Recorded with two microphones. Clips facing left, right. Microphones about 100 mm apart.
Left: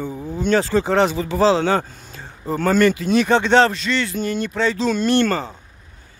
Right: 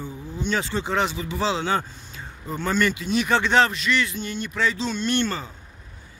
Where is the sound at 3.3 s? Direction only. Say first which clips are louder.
Left 4 dB; 25° left (ahead or behind).